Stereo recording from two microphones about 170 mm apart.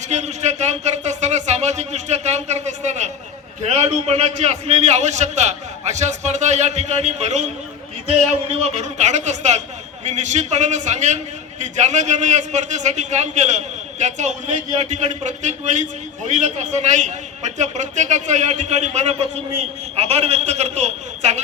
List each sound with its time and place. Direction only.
0.1 s a sound: 40° right (ahead or behind)
3.8 s a man's voice: 40° right (ahead or behind)
8.6 s a man's voice: 40° right (ahead or behind)